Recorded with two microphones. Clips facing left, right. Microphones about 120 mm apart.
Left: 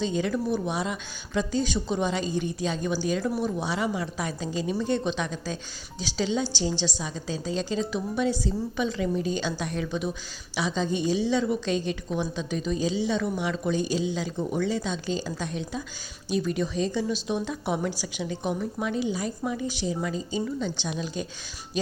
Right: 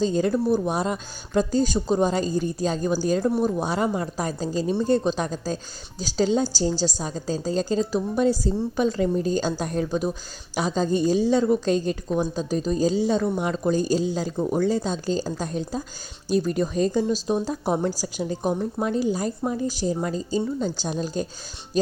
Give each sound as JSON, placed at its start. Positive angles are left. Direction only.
{"t": 0.0, "sound": "a woman's voice", "side_deg": -40}